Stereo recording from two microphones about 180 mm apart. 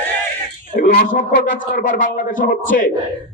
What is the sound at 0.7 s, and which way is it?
Speech, 50° left (ahead or behind).